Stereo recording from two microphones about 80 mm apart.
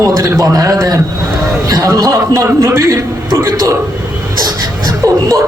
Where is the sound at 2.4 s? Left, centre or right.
Right.